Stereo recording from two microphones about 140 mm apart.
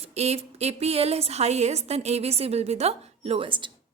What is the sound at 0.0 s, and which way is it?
A woman's voice, 50° right (ahead or behind).